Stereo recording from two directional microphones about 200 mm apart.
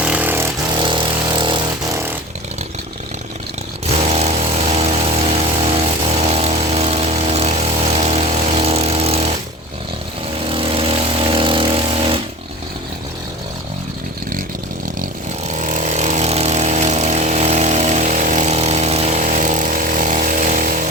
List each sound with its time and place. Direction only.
0.0 s vehicle: 5° right (ahead or behind)
0.8 s vehicle: 25° right (ahead or behind)
3.8 s vehicle: 30° right (ahead or behind)
10.4 s vehicle: 25° right (ahead or behind)
15.4 s vehicle: 35° right (ahead or behind)